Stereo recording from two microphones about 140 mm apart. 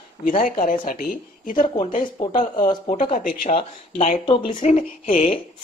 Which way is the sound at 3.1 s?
70° left (ahead or behind).